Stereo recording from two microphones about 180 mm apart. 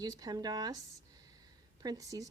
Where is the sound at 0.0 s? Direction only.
20° right (ahead or behind).